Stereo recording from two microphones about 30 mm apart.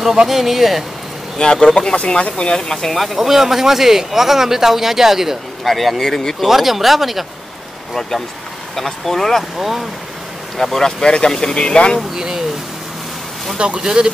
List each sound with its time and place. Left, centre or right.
0.3 s speech: centre
1.4 s speech: left
2.7 s speech: centre
3.2 s speech: centre
5.6 s speech: centre
6.4 s speech: centre
8.7 s speech: centre
9.6 s speech: centre
10.6 s speech: centre
11.5 s speech: left
12.2 s speech: centre
13.6 s speech: right